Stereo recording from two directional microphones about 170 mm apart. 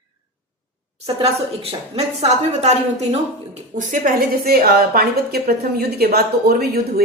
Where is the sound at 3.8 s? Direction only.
50° right (ahead or behind).